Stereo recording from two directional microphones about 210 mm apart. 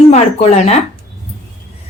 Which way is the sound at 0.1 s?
30° left (ahead or behind).